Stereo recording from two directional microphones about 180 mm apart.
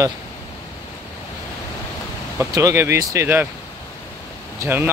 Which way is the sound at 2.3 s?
15° right (ahead or behind).